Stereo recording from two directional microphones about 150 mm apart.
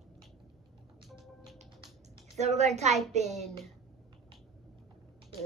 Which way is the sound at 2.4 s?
50° right (ahead or behind).